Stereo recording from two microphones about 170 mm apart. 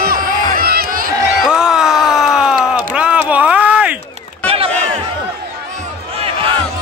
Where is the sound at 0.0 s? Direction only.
60° right (ahead or behind).